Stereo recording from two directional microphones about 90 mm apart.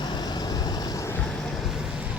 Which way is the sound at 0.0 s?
50° left (ahead or behind).